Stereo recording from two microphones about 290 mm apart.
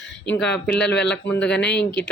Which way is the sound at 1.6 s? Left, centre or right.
Left.